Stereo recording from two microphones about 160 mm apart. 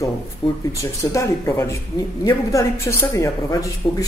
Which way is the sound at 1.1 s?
20° left (ahead or behind).